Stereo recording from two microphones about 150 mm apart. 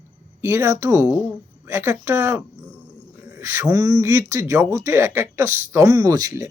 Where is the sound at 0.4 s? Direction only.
15° right (ahead or behind).